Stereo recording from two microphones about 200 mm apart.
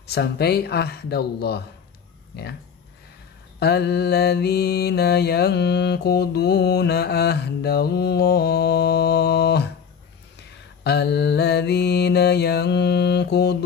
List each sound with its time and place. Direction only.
0.0 s speech: 55° left (ahead or behind)
3.5 s mantra: 55° left (ahead or behind)
10.8 s mantra: 55° left (ahead or behind)